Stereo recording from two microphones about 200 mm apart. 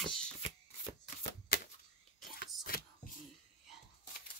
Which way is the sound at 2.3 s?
45° left (ahead or behind).